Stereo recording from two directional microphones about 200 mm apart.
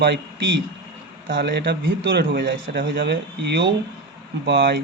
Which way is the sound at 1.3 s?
60° right (ahead or behind).